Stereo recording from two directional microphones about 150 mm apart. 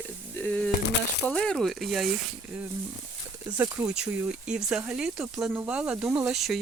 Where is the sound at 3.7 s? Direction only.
5° right (ahead or behind).